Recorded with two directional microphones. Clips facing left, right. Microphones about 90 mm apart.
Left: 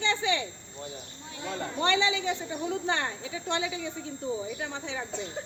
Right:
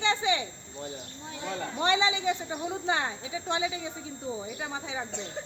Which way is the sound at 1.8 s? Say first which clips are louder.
Even; 20° right (ahead or behind).